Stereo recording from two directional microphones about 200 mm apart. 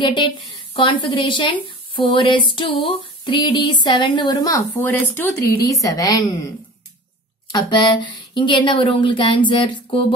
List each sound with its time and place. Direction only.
0.0 s a woman's voice: 25° left (ahead or behind)
7.5 s a woman's voice: 20° left (ahead or behind)